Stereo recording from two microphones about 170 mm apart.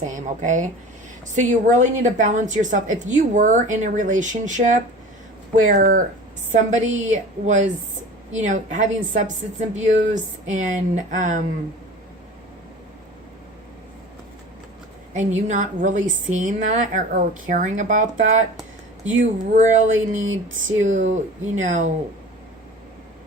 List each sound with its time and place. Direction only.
0.0 s a woman's voice: 45° right (ahead or behind)
15.1 s a woman's voice: 45° right (ahead or behind)